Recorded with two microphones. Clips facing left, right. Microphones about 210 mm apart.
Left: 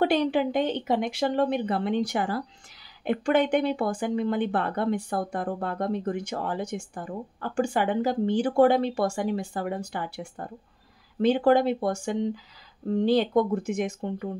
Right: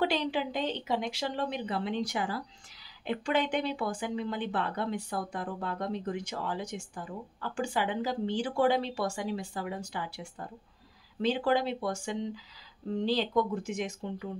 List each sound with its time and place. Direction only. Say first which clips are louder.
0.0 s speech: left 7 dB; 55° left (ahead or behind)